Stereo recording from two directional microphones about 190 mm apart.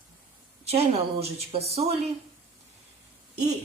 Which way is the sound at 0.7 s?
30° right (ahead or behind).